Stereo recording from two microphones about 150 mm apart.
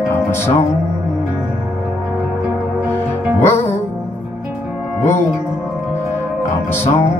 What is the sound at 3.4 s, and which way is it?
Music, 15° left (ahead or behind).